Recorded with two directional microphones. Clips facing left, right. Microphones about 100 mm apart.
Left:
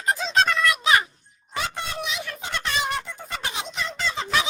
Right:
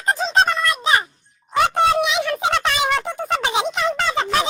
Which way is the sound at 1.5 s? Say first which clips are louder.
Right 13 dB; 65° right (ahead or behind).